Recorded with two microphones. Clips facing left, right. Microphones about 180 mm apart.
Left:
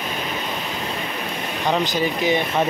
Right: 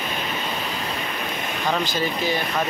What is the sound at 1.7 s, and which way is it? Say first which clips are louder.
Speech: left 3 dB; 20° left (ahead or behind).